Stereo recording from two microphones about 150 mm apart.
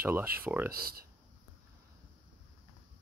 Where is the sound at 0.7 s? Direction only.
80° right.